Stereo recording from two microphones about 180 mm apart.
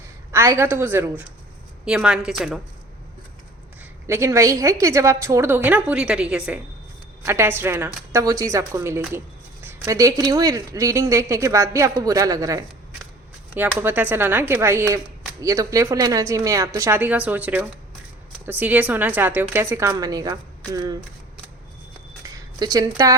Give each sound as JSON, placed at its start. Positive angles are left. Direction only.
{"t": 0.3, "sound": "a woman's voice", "side_deg": -15}
{"t": 4.0, "sound": "speech", "side_deg": -15}
{"t": 22.4, "sound": "speech", "side_deg": -20}